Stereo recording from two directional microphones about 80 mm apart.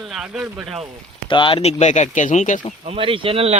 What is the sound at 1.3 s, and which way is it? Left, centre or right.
Speech, left.